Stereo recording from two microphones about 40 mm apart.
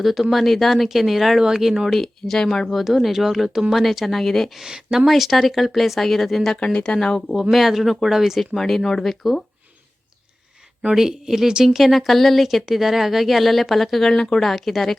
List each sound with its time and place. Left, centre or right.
0.0 s speech: centre
1.9 s speech: centre
2.6 s speech: centre
4.7 s speech: centre
5.0 s speech: centre
6.7 s speech: left
7.7 s speech: centre
8.5 s speech: centre
10.9 s speech: centre